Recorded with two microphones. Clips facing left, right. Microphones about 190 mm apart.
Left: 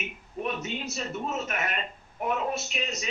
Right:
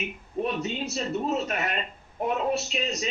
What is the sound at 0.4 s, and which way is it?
Speech, 30° right (ahead or behind).